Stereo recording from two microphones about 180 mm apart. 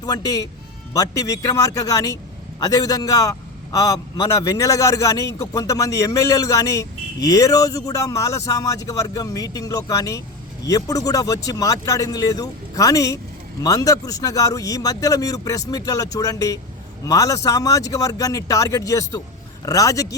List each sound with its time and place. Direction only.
0.0 s a man's voice: 20° left (ahead or behind)